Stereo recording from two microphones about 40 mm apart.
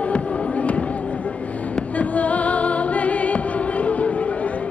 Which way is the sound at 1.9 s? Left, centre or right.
Left.